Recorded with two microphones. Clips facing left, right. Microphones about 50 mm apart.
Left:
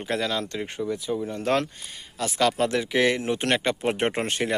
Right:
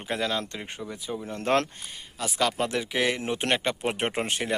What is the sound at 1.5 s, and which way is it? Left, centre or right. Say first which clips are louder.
Speech: even; right.